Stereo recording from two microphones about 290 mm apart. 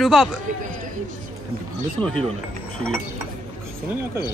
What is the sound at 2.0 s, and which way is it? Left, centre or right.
Speech, centre.